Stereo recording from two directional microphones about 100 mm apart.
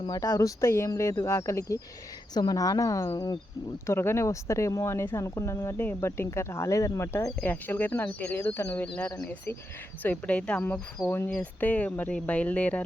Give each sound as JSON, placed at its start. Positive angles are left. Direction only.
{"t": 0.2, "sound": "speech", "side_deg": 30}
{"t": 7.4, "sound": "speech", "side_deg": 15}